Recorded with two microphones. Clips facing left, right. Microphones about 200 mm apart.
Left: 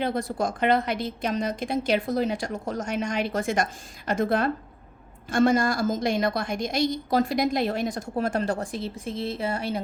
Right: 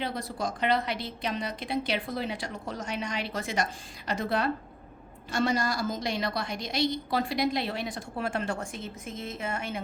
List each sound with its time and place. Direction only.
0.0 s a woman's voice: 50° left (ahead or behind)